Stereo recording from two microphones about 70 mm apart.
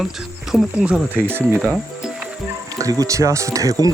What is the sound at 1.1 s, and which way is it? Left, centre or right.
Speech, right.